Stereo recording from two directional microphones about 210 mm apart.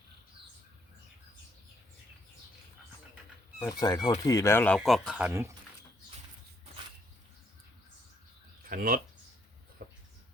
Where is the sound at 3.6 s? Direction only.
20° left (ahead or behind); by 5.6 s 10° right (ahead or behind).